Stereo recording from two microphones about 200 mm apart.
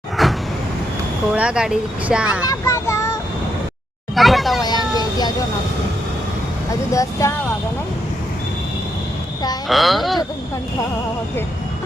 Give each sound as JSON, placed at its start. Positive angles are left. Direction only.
{"t": 0.2, "sound": "vehicle", "side_deg": 0}
{"t": 1.3, "sound": "speech", "side_deg": -5}
{"t": 2.5, "sound": "child singing", "side_deg": 15}
{"t": 4.1, "sound": "speech", "side_deg": 0}
{"t": 4.6, "sound": "vehicle", "side_deg": 20}
{"t": 6.9, "sound": "speech", "side_deg": 15}
{"t": 9.6, "sound": "speech", "side_deg": 0}